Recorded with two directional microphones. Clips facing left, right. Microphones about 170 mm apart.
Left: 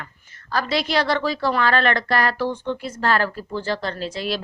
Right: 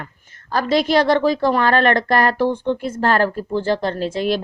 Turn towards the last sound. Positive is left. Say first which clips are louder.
# right 6 dB
turn(degrees=-50)  # may be behind; listen again after turning